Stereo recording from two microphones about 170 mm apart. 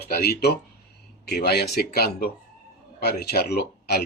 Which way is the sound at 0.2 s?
70° left (ahead or behind).